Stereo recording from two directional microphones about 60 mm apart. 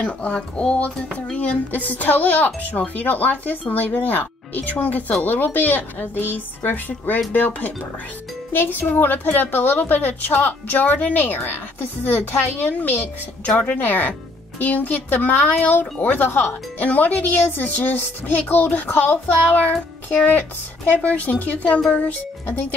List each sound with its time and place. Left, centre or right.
0.0 s speech: centre